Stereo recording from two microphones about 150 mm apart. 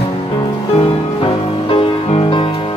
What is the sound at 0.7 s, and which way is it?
Music, 35° left (ahead or behind).